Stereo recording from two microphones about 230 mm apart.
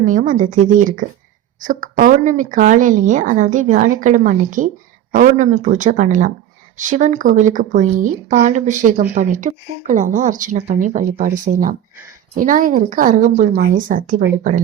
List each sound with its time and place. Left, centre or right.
0.0 s speech: right